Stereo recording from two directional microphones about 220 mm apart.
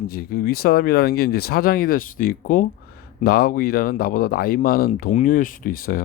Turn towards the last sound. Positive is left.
turn(degrees=40)  # may be behind; listen again after turning